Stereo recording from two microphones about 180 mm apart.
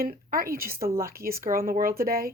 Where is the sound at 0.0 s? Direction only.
50° right (ahead or behind).